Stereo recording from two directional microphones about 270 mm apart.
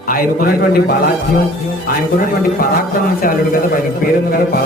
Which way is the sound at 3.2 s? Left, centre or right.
Left.